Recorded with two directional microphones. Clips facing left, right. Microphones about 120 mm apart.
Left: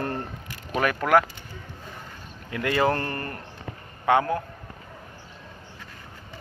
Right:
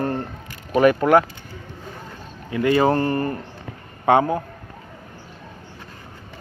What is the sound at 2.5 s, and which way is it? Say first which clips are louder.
Speech: right 6 dB; 15° right (ahead or behind).